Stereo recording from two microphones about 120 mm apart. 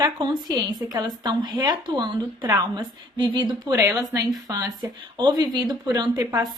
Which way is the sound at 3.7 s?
25° right (ahead or behind).